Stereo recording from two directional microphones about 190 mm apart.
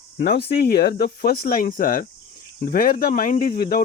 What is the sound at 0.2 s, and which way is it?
Speech, 55° left (ahead or behind).